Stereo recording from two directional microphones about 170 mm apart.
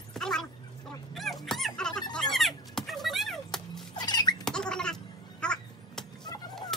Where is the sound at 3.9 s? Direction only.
25° left (ahead or behind).